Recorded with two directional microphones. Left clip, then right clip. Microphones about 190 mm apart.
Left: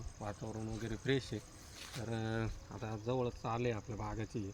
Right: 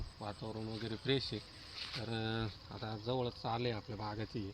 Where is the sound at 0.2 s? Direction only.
15° left (ahead or behind).